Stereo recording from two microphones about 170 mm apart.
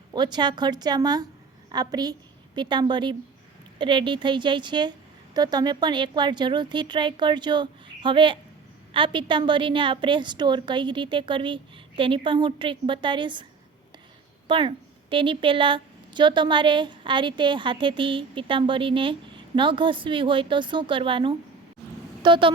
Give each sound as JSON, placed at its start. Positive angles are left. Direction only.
{"t": 0.1, "sound": "a woman's voice", "side_deg": -25}
{"t": 14.4, "sound": "a woman's voice", "side_deg": -30}